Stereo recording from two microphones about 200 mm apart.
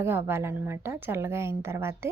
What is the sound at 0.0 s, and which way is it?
Speech, 10° right (ahead or behind).